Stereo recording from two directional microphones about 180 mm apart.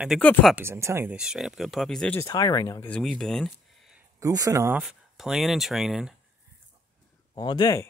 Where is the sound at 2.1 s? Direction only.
20° left (ahead or behind).